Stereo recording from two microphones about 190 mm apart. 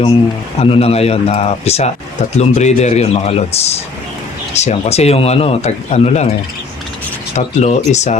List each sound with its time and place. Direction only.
0.6 s speech: 30° left (ahead or behind)
7.3 s speech: 35° left (ahead or behind)